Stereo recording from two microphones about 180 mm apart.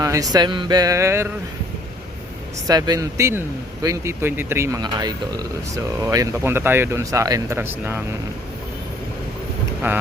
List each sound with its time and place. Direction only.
0.0 s speech: 20° right (ahead or behind)
2.6 s speech: 20° right (ahead or behind)
9.8 s speech: 10° right (ahead or behind)